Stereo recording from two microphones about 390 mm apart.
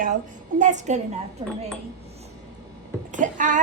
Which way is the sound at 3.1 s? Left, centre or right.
Centre.